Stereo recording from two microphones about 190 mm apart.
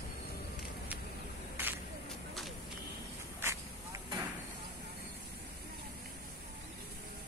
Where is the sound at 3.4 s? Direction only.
15° right (ahead or behind).